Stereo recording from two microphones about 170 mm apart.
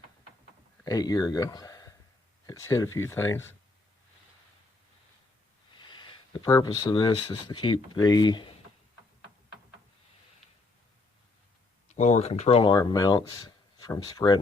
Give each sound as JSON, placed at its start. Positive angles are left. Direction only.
{"t": 0.9, "sound": "speech", "side_deg": 20}
{"t": 5.7, "sound": "speech", "side_deg": 25}
{"t": 11.9, "sound": "speech", "side_deg": 40}
{"t": 12.7, "sound": "speech", "side_deg": 20}